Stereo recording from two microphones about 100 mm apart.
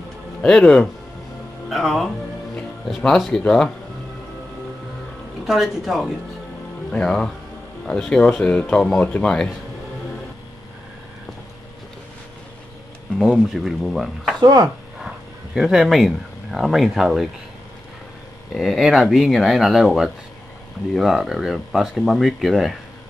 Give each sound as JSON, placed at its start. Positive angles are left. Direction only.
{"t": 0.4, "sound": "speech", "side_deg": 10}
{"t": 3.2, "sound": "speech", "side_deg": 5}
{"t": 5.4, "sound": "speech", "side_deg": 0}
{"t": 13.2, "sound": "speech", "side_deg": 0}
{"t": 14.4, "sound": "speech", "side_deg": -40}
{"t": 15.0, "sound": "speech", "side_deg": -5}
{"t": 18.5, "sound": "speech", "side_deg": 0}